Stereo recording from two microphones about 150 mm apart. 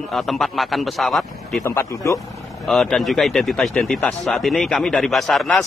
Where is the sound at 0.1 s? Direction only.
Centre (ahead or behind).